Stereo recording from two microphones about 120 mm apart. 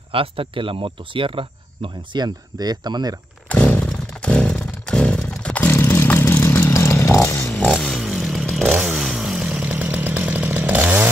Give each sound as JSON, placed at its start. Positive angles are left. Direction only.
{"t": 0.1, "sound": "speech", "side_deg": -50}
{"t": 3.4, "sound": "a sound", "side_deg": 10}
{"t": 7.7, "sound": "motorcycle", "side_deg": 0}
{"t": 8.6, "sound": "chainsaw", "side_deg": -5}